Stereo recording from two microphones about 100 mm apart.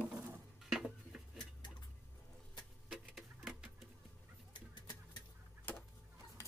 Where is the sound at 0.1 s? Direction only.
5° right (ahead or behind).